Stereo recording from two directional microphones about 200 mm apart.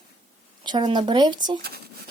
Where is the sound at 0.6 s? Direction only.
20° right (ahead or behind).